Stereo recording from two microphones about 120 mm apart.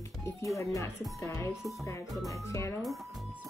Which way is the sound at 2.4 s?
25° left (ahead or behind).